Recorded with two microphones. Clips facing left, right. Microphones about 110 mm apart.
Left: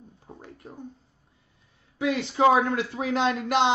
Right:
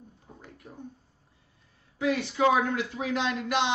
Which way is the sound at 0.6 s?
30° left (ahead or behind).